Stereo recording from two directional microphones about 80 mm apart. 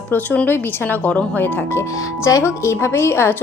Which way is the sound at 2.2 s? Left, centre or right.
Left.